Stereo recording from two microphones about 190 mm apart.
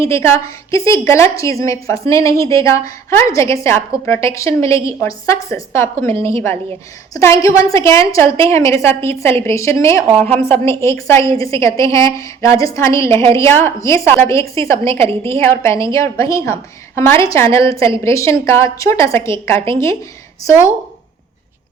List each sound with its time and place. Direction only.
0.0 s a woman's voice: 15° left (ahead or behind)